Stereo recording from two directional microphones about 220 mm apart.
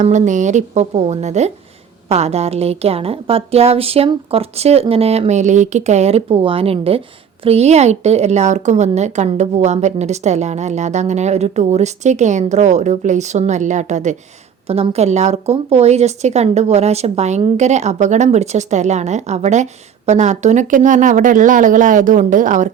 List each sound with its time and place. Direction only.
0.0 s a woman's voice: 35° right (ahead or behind)